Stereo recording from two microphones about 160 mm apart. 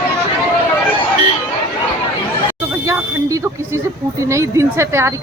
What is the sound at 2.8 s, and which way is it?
Smoke detector, 20° right (ahead or behind).